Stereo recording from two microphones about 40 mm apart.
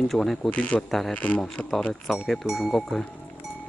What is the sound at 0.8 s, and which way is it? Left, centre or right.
Speech, centre.